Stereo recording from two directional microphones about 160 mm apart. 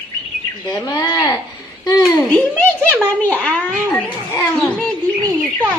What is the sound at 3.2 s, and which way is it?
A child's voice, 10° left (ahead or behind).